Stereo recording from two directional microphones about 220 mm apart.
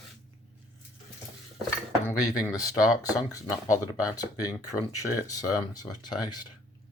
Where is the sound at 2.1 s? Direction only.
15° left (ahead or behind).